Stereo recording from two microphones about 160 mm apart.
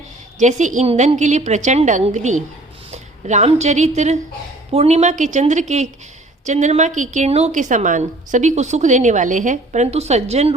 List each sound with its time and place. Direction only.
0.3 s a woman's voice: 50° right (ahead or behind)